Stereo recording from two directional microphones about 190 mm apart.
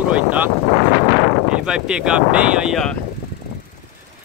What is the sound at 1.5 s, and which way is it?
Speech, 5° right (ahead or behind).